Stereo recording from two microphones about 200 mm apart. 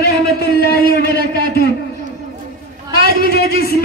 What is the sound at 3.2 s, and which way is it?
Speech, 50° left (ahead or behind).